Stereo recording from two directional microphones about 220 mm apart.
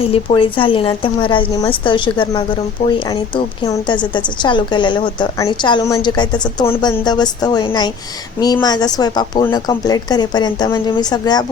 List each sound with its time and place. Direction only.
0.0 s a woman's voice: 25° left (ahead or behind)